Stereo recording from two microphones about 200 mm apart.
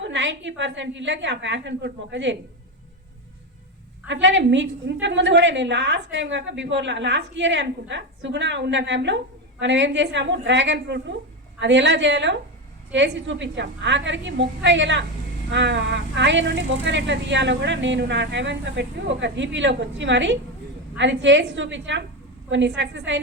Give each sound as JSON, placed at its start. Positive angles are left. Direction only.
{"t": 0.0, "sound": "a woman's voice", "side_deg": -65}
{"t": 4.1, "sound": "a woman's voice", "side_deg": -65}